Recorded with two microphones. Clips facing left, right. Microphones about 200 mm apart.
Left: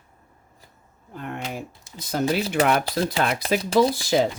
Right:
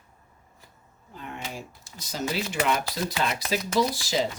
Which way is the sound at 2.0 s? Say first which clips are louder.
Left 9 dB; 55° left (ahead or behind).